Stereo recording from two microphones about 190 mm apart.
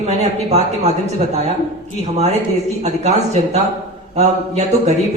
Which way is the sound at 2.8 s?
35° right (ahead or behind).